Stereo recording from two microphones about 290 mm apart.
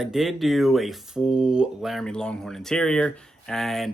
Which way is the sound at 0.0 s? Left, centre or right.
Centre.